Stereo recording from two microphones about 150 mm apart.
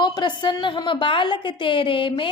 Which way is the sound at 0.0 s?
30° left (ahead or behind).